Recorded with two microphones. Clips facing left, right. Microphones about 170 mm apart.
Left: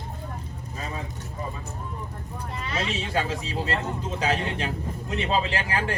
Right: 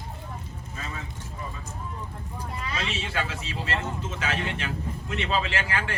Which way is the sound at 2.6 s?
25° left (ahead or behind).